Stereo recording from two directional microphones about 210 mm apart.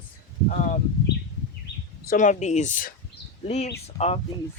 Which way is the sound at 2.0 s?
35° left (ahead or behind).